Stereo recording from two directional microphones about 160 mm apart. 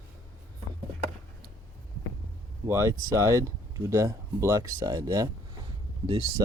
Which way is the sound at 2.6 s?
15° right (ahead or behind).